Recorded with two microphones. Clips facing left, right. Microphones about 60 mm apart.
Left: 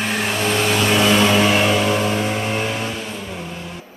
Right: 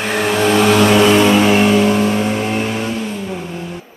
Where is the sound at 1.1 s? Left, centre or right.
Right.